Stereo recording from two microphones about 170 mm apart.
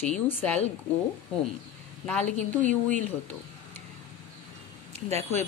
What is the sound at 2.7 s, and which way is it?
Speech, 50° right (ahead or behind).